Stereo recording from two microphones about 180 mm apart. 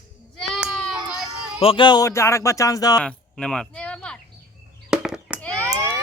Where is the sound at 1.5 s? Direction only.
30° left (ahead or behind).